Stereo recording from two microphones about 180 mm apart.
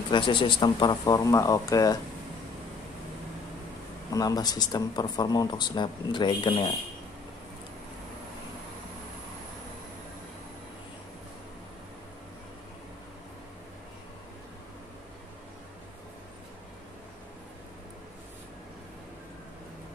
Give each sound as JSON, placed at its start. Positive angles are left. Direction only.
{"t": 0.1, "sound": "speech", "side_deg": 30}
{"t": 4.1, "sound": "speech", "side_deg": 20}